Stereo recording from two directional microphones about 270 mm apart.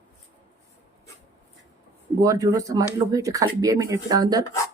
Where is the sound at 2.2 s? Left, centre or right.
Centre.